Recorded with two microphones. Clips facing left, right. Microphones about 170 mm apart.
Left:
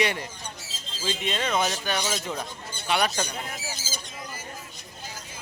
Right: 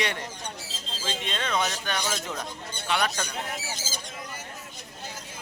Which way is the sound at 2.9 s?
15° left (ahead or behind).